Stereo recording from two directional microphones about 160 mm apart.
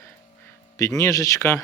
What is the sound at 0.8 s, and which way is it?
Speech, 20° left (ahead or behind).